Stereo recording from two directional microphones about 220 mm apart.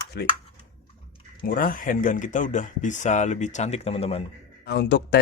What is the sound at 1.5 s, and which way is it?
Speech, 40° left (ahead or behind).